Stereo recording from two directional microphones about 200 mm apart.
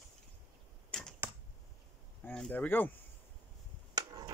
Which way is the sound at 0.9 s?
5° left (ahead or behind).